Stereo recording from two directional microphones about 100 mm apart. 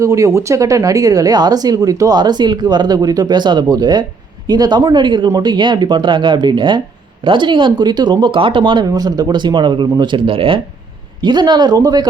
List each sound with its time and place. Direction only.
0.0 s speech: 30° right (ahead or behind); by 8.9 s 50° right (ahead or behind)
8.9 s speech: 40° right (ahead or behind); by 10.6 s 65° right (ahead or behind)
11.2 s speech: 50° right (ahead or behind)